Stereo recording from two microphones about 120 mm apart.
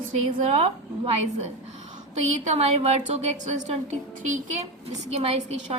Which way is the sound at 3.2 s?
80° right.